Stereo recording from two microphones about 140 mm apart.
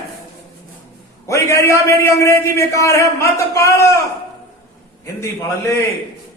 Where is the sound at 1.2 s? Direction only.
20° left (ahead or behind).